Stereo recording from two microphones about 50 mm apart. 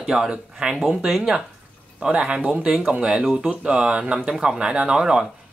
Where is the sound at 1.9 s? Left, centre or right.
Centre.